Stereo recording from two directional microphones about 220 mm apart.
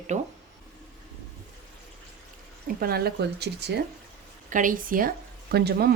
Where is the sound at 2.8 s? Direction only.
45° right (ahead or behind).